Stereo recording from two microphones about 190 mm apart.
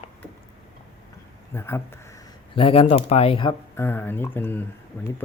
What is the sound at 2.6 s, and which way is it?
Speech, 30° left (ahead or behind).